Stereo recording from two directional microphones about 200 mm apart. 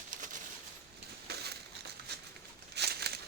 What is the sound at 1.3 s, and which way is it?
Crushing, 55° right (ahead or behind).